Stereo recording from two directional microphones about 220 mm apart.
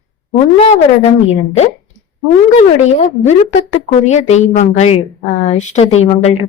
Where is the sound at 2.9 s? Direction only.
30° left (ahead or behind).